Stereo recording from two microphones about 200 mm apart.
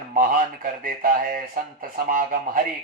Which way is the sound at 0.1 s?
45° right (ahead or behind).